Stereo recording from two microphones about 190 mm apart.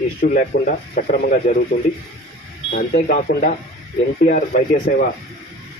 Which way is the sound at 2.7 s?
50° left (ahead or behind).